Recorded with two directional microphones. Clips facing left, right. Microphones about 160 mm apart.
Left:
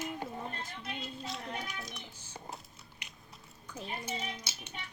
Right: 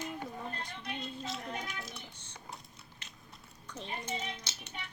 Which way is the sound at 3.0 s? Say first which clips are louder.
Left 2 dB; 15° left (ahead or behind).